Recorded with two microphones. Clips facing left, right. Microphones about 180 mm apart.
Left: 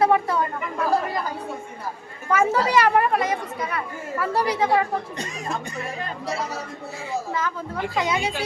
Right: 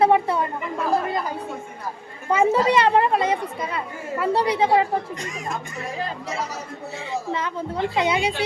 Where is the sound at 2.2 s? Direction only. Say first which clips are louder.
Right 2 dB; 25° right (ahead or behind).